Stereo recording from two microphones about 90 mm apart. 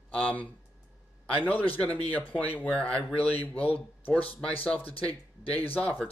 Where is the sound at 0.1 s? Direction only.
15° left (ahead or behind).